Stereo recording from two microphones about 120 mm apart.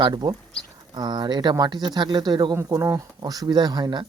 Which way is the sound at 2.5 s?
25° right (ahead or behind).